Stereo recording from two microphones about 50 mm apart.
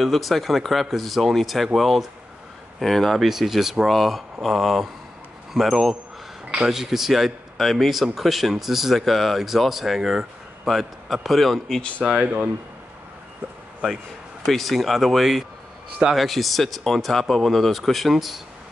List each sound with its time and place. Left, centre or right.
0.0 s a man's voice: centre
14.4 s a man's voice: centre